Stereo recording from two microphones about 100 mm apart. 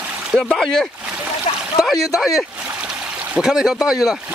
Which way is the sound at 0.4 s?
5° left (ahead or behind).